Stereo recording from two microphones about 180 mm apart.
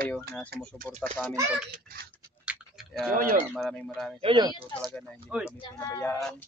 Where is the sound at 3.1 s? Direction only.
50° right (ahead or behind).